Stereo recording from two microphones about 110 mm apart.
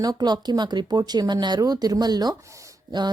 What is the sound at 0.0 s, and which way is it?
Speech, 40° right (ahead or behind).